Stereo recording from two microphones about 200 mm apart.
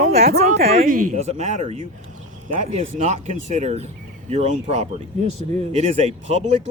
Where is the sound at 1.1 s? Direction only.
35° right (ahead or behind).